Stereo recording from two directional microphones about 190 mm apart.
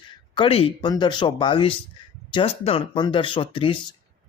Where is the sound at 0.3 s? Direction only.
30° left (ahead or behind).